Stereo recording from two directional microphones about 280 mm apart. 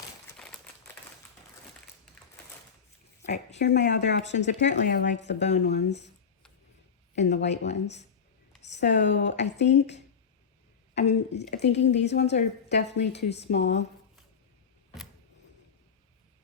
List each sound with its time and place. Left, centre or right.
3.2 s a sound: left
3.6 s speech: left
7.3 s speech: left
11.1 s speech: left